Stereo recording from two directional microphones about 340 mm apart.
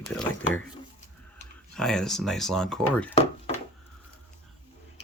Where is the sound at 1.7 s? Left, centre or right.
Centre.